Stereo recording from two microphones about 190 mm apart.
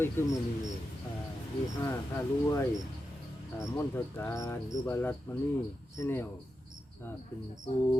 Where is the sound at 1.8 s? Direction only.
15° left (ahead or behind).